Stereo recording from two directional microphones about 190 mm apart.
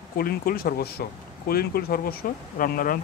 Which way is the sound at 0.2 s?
50° left (ahead or behind).